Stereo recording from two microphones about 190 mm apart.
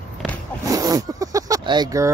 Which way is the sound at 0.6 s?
20° right (ahead or behind).